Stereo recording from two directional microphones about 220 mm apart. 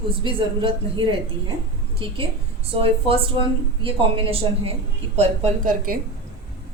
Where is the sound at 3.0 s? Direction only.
25° right (ahead or behind).